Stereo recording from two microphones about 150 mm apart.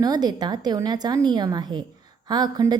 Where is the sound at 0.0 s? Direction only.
25° right (ahead or behind).